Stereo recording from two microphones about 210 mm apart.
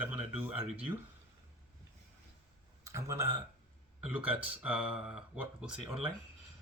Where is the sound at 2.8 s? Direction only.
15° right (ahead or behind).